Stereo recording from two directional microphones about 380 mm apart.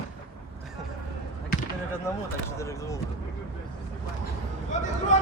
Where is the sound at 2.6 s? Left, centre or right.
Centre.